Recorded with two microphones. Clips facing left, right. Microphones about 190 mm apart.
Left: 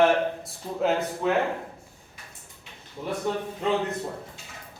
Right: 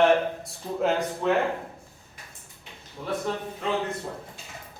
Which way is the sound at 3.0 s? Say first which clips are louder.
Left 1 dB; 15° left (ahead or behind).